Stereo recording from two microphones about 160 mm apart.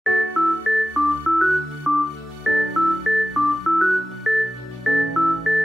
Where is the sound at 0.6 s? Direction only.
Centre (ahead or behind).